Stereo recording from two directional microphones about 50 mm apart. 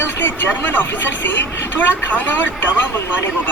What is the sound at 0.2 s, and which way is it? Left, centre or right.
Speech, left.